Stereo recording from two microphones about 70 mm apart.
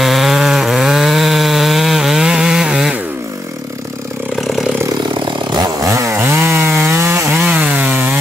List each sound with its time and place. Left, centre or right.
0.0 s chainsaw: centre
5.2 s chainsaw: right
5.8 s chainsaw: right
6.1 s chainsaw: right
7.4 s chainsaw: right